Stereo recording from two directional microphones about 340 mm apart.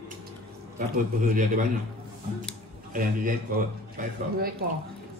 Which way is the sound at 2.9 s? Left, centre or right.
Right.